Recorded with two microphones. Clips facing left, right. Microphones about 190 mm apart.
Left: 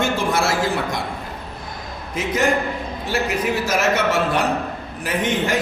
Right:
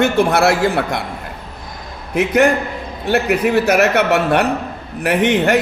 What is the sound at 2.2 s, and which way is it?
A man's voice, 65° right (ahead or behind).